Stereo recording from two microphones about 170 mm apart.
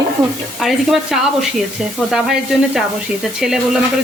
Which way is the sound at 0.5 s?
Centre (ahead or behind).